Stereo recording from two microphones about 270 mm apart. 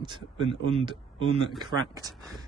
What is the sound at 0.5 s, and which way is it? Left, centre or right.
Speech, right.